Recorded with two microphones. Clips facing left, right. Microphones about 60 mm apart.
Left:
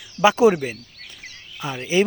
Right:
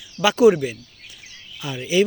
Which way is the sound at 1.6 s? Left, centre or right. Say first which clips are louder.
Even; left.